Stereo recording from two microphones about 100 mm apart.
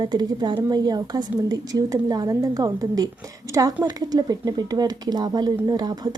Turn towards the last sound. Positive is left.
turn(degrees=-40)  # may be behind; listen again after turning